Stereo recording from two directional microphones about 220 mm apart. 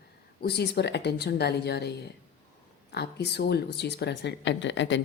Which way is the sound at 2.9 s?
50° left (ahead or behind).